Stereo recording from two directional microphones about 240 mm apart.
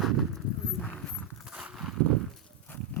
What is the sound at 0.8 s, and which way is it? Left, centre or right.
Horse, centre.